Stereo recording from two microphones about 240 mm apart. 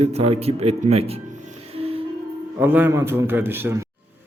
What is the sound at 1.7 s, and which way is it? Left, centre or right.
Music, right.